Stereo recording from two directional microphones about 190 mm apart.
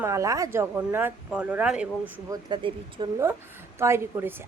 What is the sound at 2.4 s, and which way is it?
A woman's voice, 25° right (ahead or behind).